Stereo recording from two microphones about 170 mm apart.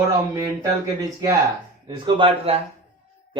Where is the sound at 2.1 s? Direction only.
35° right (ahead or behind).